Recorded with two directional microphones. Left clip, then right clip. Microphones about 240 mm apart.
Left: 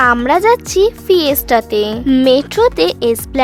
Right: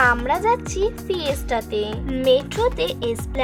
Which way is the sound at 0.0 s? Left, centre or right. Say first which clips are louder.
Left 7 dB; left.